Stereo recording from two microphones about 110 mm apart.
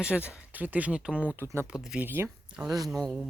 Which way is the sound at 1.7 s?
10° right (ahead or behind).